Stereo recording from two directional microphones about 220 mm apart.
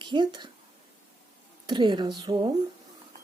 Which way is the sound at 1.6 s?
20° right (ahead or behind).